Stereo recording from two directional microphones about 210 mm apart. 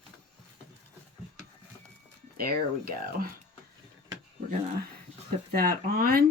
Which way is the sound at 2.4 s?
45° right (ahead or behind).